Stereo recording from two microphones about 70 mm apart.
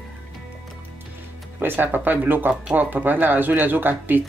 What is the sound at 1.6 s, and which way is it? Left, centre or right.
Speech, right.